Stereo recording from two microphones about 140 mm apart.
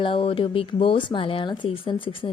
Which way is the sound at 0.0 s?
40° left (ahead or behind).